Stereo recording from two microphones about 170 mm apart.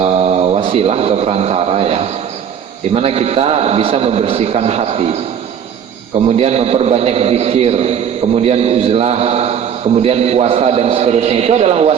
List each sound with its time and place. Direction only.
0.0 s a man's voice: 40° right (ahead or behind)
6.3 s a man's voice: 35° right (ahead or behind)